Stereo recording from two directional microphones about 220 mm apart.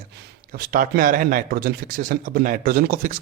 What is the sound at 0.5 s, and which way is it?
Speech, 40° right (ahead or behind).